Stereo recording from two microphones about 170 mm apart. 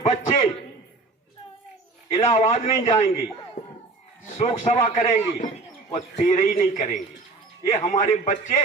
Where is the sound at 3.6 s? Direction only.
45° left (ahead or behind).